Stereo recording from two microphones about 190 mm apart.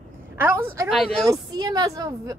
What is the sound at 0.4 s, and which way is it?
Speech, 10° right (ahead or behind).